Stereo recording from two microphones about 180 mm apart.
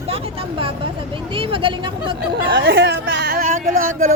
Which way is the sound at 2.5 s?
90° right.